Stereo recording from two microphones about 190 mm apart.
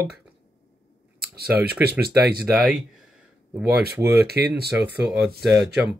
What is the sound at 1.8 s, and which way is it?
Speech, 55° right (ahead or behind).